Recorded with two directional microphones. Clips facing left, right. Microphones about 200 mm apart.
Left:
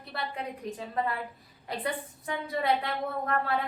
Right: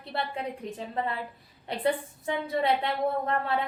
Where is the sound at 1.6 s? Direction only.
25° right (ahead or behind).